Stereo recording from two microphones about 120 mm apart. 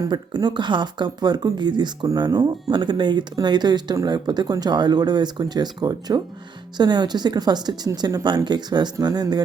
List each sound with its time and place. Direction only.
0.0 s speech: 35° right (ahead or behind)